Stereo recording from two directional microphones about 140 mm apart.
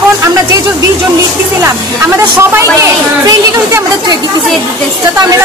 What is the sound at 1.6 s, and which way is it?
A woman's voice, 20° right (ahead or behind).